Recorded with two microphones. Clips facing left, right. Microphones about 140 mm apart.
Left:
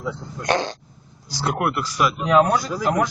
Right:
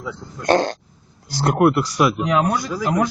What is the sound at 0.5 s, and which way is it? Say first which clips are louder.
Speech: right 6 dB; 50° right (ahead or behind).